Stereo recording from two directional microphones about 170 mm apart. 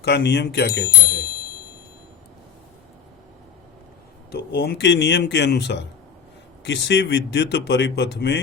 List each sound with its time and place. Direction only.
0.0 s speech: 80° left; by 1.3 s 65° left (ahead or behind)
4.3 s speech: 70° left (ahead or behind); by 8.4 s 85° left